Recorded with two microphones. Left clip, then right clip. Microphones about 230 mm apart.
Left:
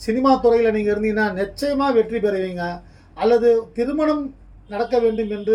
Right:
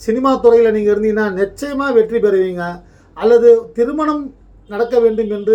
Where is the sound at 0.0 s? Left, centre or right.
Centre.